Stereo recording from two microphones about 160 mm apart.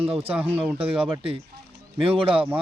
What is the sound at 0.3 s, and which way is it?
Speech, 10° right (ahead or behind).